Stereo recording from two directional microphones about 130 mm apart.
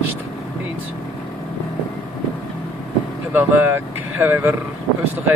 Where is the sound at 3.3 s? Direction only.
15° right (ahead or behind).